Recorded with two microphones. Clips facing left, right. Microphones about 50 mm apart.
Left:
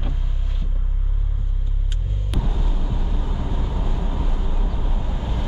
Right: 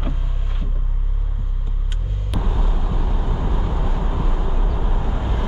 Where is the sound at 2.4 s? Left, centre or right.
Centre.